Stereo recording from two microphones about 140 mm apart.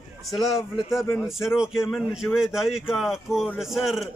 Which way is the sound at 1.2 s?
5° right (ahead or behind).